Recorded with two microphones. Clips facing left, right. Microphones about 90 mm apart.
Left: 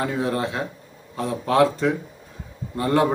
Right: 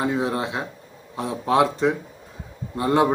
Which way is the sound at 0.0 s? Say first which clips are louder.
Even; 20° right (ahead or behind).